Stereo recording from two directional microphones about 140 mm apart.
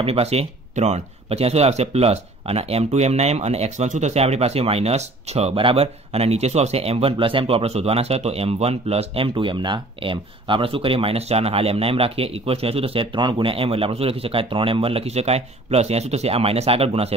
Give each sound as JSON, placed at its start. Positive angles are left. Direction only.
{"t": 0.0, "sound": "speech", "side_deg": -45}